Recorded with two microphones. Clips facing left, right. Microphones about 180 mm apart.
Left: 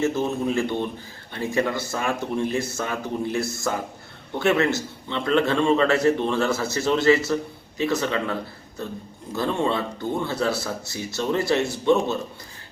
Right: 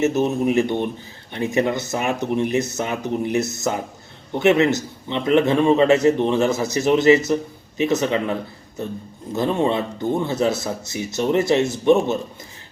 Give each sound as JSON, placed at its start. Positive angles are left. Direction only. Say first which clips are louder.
{"t": 0.0, "sound": "a man's voice", "louder": "right 4 dB", "side_deg": -20}